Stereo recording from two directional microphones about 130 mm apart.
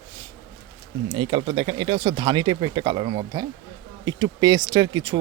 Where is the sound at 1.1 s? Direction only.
40° right (ahead or behind).